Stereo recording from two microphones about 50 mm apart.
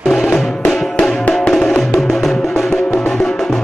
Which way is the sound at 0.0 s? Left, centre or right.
Centre.